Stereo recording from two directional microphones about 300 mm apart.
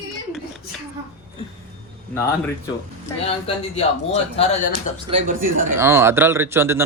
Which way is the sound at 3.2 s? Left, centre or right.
Centre.